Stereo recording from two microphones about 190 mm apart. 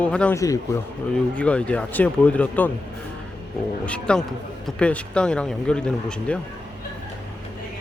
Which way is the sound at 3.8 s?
5° left (ahead or behind).